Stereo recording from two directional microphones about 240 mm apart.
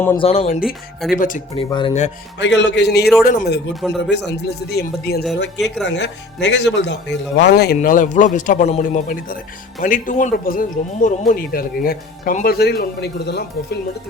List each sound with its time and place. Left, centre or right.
0.2 s speech: left
1.5 s speech: left
2.4 s a man's voice: left
3.8 s speech: centre
4.1 s speech: left